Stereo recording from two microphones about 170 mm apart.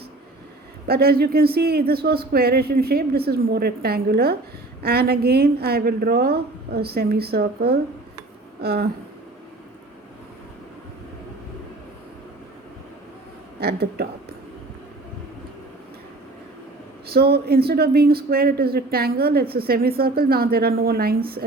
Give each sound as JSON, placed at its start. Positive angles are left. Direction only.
{"t": 0.9, "sound": "speech", "side_deg": -65}
{"t": 13.6, "sound": "speech", "side_deg": -70}
{"t": 17.1, "sound": "speech", "side_deg": -70}